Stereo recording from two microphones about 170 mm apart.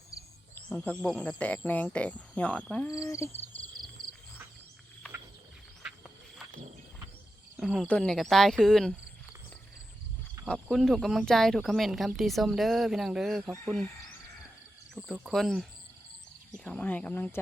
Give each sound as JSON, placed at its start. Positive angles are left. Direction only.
{"t": 0.5, "sound": "speech", "side_deg": 5}
{"t": 2.9, "sound": "speech", "side_deg": 20}
{"t": 7.5, "sound": "cricket", "side_deg": -5}
{"t": 7.9, "sound": "speech", "side_deg": 5}
{"t": 10.4, "sound": "speech", "side_deg": 0}
{"t": 15.0, "sound": "speech", "side_deg": 0}
{"t": 16.6, "sound": "speech", "side_deg": 10}